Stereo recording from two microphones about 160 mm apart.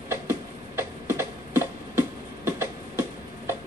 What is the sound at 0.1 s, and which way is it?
Tick-tock, 15° right (ahead or behind).